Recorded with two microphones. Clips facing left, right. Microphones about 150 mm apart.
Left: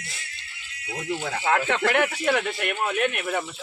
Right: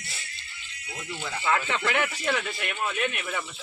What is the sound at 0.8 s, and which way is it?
Speech, 70° left (ahead or behind).